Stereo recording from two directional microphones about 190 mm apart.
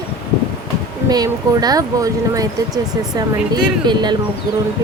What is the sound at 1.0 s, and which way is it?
Speech, 20° right (ahead or behind).